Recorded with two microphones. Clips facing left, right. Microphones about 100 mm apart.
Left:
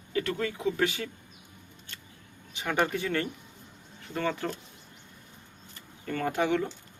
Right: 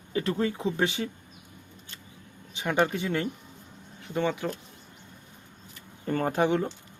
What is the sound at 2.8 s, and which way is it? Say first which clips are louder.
Speech: right 1 dB; 20° right (ahead or behind).